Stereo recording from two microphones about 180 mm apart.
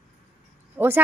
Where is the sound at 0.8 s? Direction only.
10° right (ahead or behind).